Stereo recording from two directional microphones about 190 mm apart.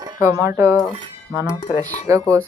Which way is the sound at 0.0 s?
15° right (ahead or behind).